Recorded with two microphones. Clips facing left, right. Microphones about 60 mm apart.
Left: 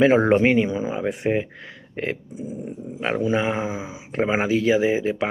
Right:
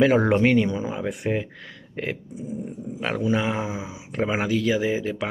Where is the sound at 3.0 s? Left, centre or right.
Left.